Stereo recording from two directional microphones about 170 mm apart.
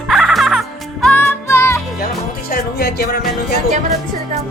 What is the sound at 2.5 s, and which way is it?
Music, 65° left (ahead or behind).